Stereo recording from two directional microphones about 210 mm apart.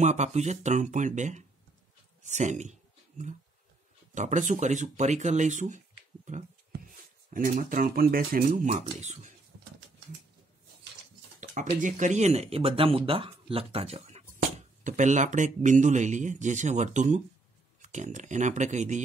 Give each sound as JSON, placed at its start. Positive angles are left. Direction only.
{"t": 0.0, "sound": "speech", "side_deg": -35}
{"t": 7.3, "sound": "speech", "side_deg": -40}
{"t": 11.8, "sound": "speech", "side_deg": -35}